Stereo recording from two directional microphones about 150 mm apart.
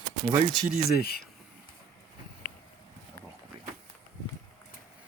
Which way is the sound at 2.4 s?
60° left (ahead or behind).